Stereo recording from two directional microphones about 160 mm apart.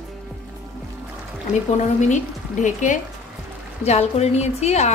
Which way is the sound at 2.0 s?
50° left (ahead or behind).